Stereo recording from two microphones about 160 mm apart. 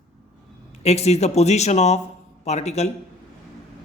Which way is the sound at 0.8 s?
40° left (ahead or behind).